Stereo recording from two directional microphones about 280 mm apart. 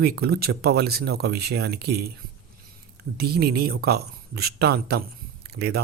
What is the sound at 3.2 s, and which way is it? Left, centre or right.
Speech, right.